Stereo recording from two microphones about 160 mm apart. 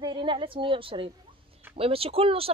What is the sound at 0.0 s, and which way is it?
A woman's voice, 30° right (ahead or behind).